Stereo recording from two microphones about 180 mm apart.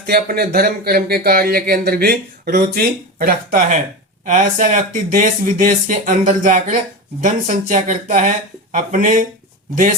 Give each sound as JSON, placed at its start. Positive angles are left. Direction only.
{"t": 0.0, "sound": "speech", "side_deg": -55}